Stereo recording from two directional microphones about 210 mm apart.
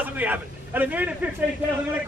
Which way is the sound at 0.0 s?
10° right (ahead or behind).